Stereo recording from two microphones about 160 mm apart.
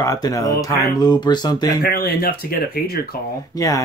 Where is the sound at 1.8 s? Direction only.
75° left (ahead or behind).